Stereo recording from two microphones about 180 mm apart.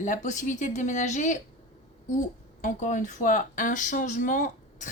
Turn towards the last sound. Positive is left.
turn(degrees=45)  # may be behind; listen again after turning